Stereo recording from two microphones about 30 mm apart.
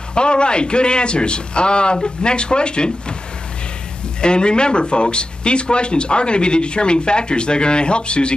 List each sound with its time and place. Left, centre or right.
0.1 s speech: left
4.2 s speech: left